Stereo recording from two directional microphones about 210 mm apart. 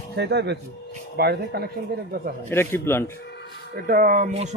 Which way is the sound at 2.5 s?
10° left (ahead or behind).